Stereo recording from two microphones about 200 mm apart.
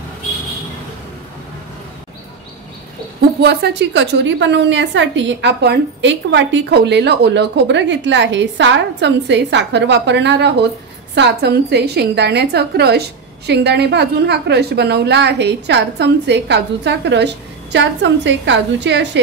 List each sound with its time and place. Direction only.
3.4 s a woman's voice: 60° right (ahead or behind)